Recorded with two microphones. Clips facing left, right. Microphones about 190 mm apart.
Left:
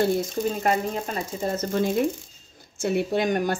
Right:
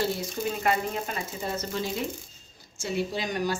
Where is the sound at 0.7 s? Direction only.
40° left (ahead or behind).